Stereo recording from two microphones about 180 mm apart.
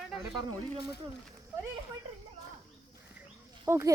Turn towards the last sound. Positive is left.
turn(degrees=-15)  # may be behind; listen again after turning